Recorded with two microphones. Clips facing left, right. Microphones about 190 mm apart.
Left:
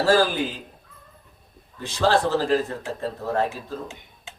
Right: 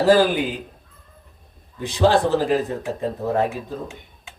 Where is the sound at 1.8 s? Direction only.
15° right (ahead or behind).